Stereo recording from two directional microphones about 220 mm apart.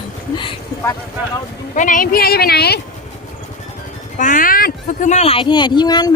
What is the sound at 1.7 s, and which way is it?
Speech, 35° left (ahead or behind).